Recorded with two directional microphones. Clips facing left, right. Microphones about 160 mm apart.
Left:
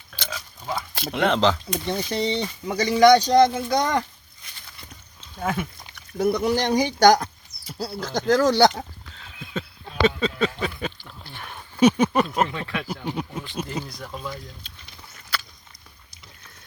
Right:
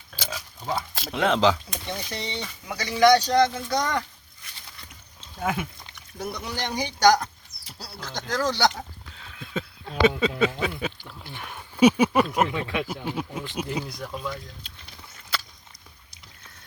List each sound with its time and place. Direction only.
0.2 s a sound: 10° right (ahead or behind)
0.9 s speech: centre (ahead or behind)
1.9 s speech: 35° left (ahead or behind)
5.4 s speech: 5° right (ahead or behind)
5.9 s speech: 45° left (ahead or behind)
9.6 s speech: 10° right (ahead or behind)
13.1 s speech: 5° right (ahead or behind)
14.1 s speech: centre (ahead or behind)
15.3 s a sound: 25° right (ahead or behind)